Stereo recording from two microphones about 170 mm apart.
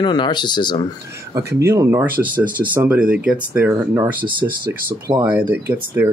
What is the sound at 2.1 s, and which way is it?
Speech, 55° right (ahead or behind).